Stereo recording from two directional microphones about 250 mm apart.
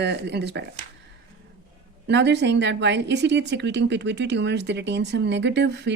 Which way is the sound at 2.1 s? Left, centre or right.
Right.